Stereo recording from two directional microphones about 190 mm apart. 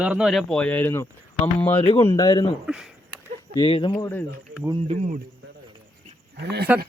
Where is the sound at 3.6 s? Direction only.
25° left (ahead or behind).